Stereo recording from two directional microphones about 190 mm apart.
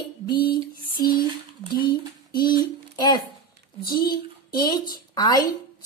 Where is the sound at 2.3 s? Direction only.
25° left (ahead or behind).